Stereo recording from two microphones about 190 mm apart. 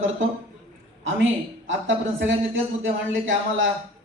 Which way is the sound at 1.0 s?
90° right.